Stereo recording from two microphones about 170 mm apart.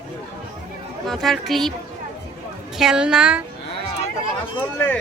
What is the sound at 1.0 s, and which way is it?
Speech, centre (ahead or behind).